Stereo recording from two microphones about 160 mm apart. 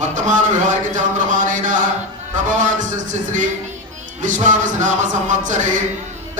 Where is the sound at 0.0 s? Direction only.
50° right (ahead or behind).